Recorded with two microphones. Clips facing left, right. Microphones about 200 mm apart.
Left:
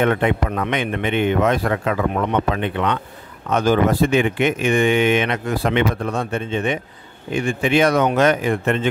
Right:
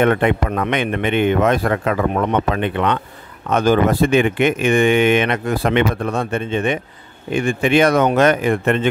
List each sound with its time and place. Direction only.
0.0 s speech: 60° right (ahead or behind)